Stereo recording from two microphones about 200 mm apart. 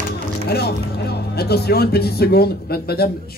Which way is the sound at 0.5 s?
55° left (ahead or behind).